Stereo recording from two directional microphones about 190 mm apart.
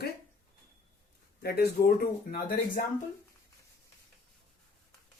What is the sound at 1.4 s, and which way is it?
Speech, 55° left (ahead or behind).